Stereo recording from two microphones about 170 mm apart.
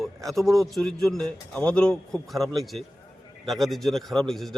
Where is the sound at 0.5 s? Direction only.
Centre (ahead or behind).